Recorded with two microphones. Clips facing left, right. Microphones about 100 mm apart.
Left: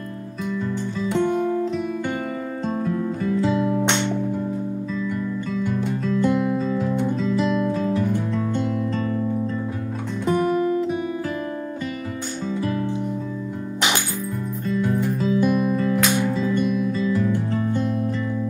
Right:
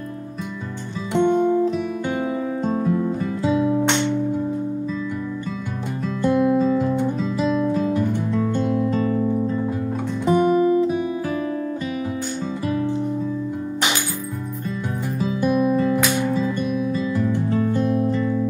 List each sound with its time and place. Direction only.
2.6 s music: 5° right (ahead or behind)
6.0 s music: centre (ahead or behind)
7.7 s guitar: 5° right (ahead or behind)
8.3 s music: centre (ahead or behind)
15.2 s music: 5° right (ahead or behind)